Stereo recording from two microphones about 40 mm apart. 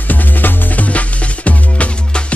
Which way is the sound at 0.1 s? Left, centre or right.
Left.